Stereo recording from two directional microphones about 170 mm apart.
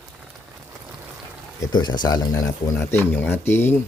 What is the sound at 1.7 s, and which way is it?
Speech, 25° left (ahead or behind).